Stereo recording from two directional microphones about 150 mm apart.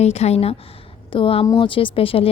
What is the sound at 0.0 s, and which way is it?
Speech, 45° left (ahead or behind).